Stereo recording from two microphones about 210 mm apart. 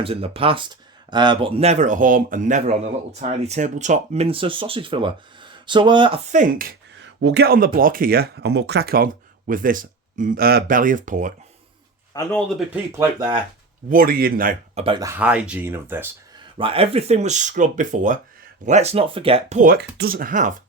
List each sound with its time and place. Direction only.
0.0 s speech: 25° right (ahead or behind)
6.2 s speech: 35° right (ahead or behind)
7.0 s speech: 60° right (ahead or behind); by 11.3 s 35° right (ahead or behind)
12.1 s speech: 15° left (ahead or behind)
12.5 s speech: centre (ahead or behind)
13.0 s speech: 20° right (ahead or behind)
13.9 s speech: 45° right (ahead or behind)
14.8 s speech: 15° right (ahead or behind)
16.6 s speech: 25° right (ahead or behind)